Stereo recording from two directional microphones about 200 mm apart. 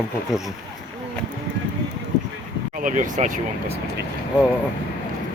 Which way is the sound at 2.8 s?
40° right (ahead or behind).